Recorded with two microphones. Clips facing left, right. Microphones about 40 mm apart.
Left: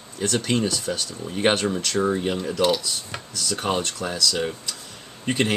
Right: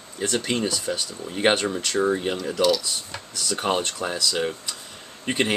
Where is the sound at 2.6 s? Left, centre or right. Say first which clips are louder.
Right 1 dB; left.